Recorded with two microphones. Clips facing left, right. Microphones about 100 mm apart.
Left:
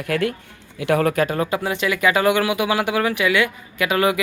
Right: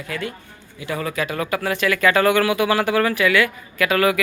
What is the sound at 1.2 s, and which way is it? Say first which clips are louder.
Speech: left 2 dB; 30° left (ahead or behind).